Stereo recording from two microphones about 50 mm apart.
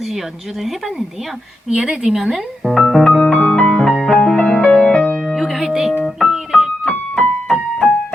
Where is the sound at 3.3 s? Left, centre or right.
Left.